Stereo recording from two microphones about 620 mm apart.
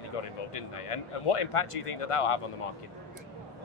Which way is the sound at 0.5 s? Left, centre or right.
Left.